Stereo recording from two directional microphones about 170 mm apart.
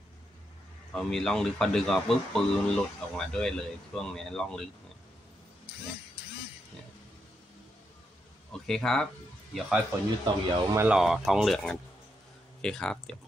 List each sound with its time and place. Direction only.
0.9 s speech: 5° left (ahead or behind)
8.6 s speech: 5° left (ahead or behind)
10.2 s speech: 20° right (ahead or behind)
10.9 s speech: centre (ahead or behind)